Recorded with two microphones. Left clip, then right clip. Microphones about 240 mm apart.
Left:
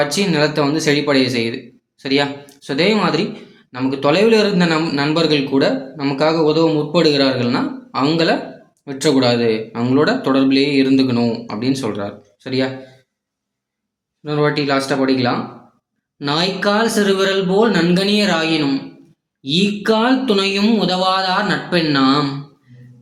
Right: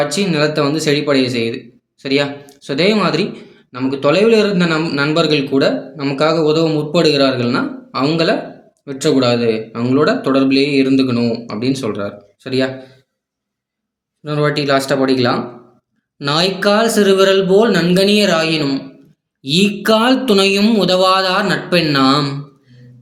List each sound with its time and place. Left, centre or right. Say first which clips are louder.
0.0 s a man's voice: right 1 dB; centre
14.3 s speech: right 1 dB; centre